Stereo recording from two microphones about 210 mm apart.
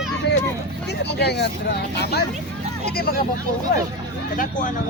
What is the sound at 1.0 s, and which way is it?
Speech, 50° left (ahead or behind).